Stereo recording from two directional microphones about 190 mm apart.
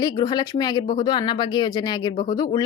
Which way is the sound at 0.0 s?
20° left (ahead or behind).